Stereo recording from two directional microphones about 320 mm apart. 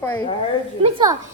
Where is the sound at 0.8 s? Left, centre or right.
Centre.